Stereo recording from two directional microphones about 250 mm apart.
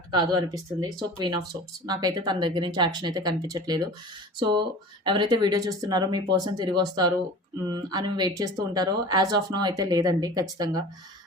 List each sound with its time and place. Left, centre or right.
0.1 s speech: centre